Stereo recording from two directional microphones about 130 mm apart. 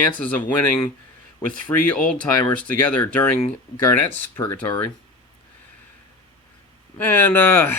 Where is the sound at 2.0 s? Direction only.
10° left (ahead or behind).